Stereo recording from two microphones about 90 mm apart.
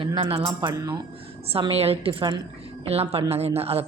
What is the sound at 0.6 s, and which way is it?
Speech, 40° right (ahead or behind).